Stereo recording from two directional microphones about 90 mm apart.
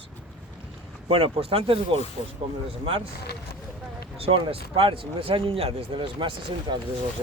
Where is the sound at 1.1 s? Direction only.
90° right.